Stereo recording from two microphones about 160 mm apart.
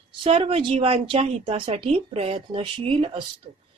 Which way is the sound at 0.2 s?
35° right (ahead or behind).